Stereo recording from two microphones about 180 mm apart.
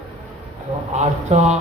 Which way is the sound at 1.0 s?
40° right (ahead or behind).